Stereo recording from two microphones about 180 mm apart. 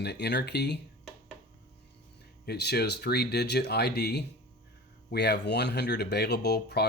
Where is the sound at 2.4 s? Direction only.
65° left (ahead or behind).